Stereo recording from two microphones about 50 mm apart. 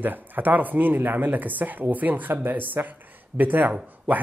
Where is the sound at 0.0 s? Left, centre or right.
Right.